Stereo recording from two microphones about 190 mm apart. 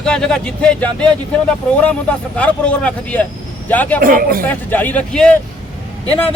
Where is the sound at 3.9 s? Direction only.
50° right (ahead or behind).